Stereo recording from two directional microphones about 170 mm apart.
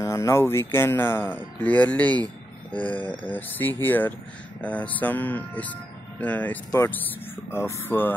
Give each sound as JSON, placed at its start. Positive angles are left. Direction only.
{"t": 0.0, "sound": "speech", "side_deg": 15}